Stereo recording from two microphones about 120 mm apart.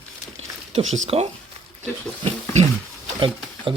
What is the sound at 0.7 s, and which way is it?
Speech, 60° right (ahead or behind).